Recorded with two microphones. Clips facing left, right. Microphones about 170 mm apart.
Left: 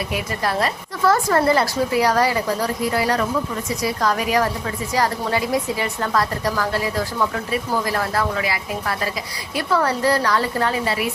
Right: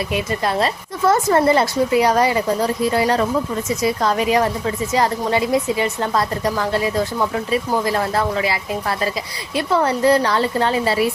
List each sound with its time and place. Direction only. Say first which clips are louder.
0.1 s a woman's voice: right 3 dB; 25° right (ahead or behind)